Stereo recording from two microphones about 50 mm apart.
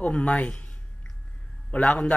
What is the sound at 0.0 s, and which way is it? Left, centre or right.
A man's voice, left.